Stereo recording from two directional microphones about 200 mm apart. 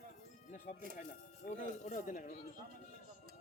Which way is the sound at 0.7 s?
40° left (ahead or behind).